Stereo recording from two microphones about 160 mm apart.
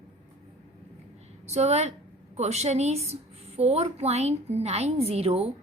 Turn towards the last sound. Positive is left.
turn(degrees=-40)  # may be behind; listen again after turning